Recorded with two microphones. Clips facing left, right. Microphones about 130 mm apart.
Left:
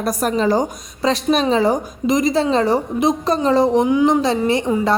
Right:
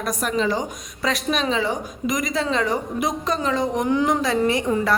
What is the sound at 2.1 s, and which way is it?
A woman's voice, 30° left (ahead or behind).